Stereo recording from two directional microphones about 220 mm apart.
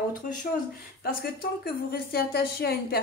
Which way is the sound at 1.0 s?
40° left (ahead or behind).